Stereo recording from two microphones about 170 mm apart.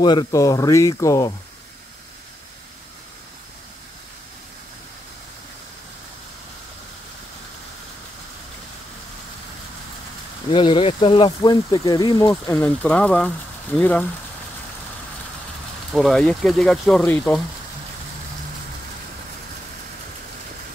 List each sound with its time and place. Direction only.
0.0 s speech: 25° left (ahead or behind)
10.5 s speech: 30° left (ahead or behind); by 14.0 s 10° left (ahead or behind)
15.9 s speech: centre (ahead or behind)